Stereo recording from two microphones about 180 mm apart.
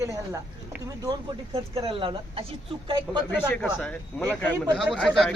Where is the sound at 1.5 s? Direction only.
30° right (ahead or behind).